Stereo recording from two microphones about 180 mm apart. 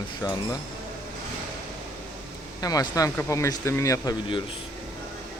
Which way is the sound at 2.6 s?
20° left (ahead or behind).